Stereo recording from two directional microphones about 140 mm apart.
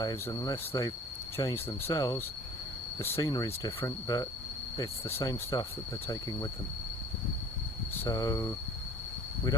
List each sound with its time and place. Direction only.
0.0 s cricket: 25° left (ahead or behind)
8.0 s cricket: 25° left (ahead or behind)